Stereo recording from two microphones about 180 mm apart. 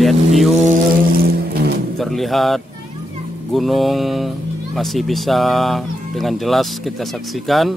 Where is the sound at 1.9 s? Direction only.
Centre (ahead or behind).